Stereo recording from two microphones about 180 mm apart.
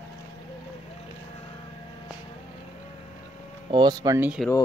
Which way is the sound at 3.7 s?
20° right (ahead or behind).